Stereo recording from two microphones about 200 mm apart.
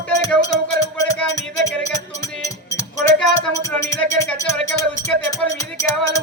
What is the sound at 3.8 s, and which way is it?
Music, 15° left (ahead or behind).